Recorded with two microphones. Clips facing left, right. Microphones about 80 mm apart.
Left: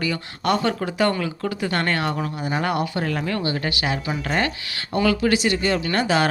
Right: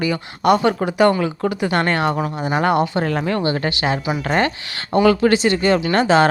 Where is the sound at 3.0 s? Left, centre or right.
Right.